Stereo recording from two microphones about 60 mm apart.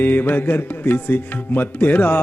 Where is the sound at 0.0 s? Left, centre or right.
Left.